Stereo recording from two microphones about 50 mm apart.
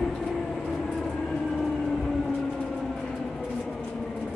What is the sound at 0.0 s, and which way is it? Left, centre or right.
Train, centre.